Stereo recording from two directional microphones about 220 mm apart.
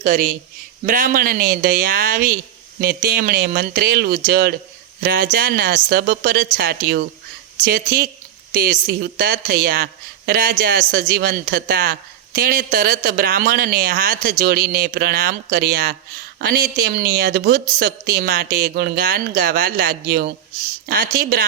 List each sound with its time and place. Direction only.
0.0 s a woman's voice: 40° right (ahead or behind)